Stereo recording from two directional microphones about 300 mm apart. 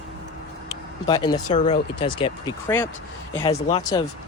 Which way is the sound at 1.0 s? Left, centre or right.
Centre.